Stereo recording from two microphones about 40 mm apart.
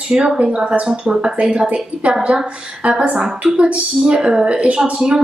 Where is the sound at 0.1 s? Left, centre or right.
Right.